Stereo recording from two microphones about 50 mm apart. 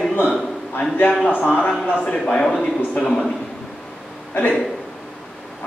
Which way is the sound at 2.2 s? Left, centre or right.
Centre.